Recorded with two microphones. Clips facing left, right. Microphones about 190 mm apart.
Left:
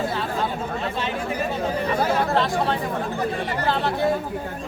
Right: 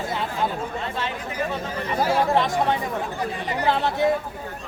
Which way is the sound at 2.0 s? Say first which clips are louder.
Right 3 dB; 15° right (ahead or behind).